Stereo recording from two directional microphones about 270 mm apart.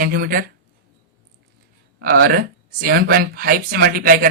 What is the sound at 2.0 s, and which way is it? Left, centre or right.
Speech, right.